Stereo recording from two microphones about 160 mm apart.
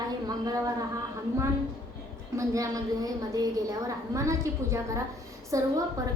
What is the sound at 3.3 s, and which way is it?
A woman's voice, 20° right (ahead or behind).